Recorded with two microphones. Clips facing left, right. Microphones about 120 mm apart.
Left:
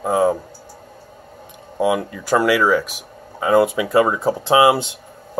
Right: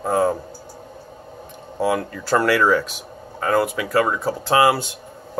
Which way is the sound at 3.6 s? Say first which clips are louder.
Left 4 dB; 20° left (ahead or behind).